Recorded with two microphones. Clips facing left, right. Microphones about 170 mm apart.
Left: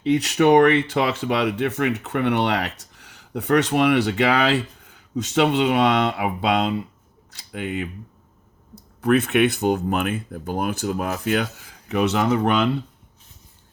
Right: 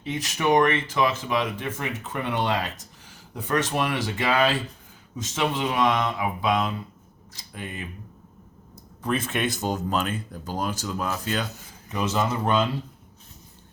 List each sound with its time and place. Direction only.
0.0 s speech: 70° left (ahead or behind)